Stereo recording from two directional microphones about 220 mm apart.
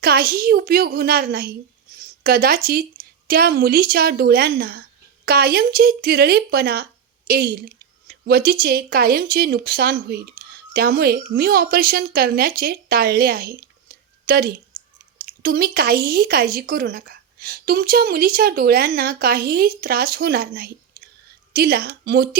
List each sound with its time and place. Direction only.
0.0 s speech: 45° right (ahead or behind)
2.0 s a sound: 40° right (ahead or behind)
3.2 s speech: 45° right (ahead or behind)